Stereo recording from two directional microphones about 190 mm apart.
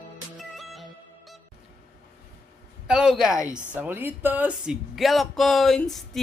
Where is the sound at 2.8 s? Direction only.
5° right (ahead or behind).